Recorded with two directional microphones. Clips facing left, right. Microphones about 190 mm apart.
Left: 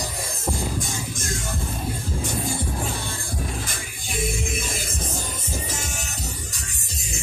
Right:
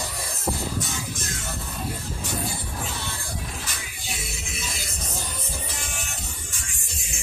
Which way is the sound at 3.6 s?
50° left (ahead or behind).